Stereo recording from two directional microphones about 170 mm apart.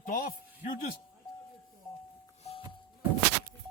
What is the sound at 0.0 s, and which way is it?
Music, 55° left (ahead or behind).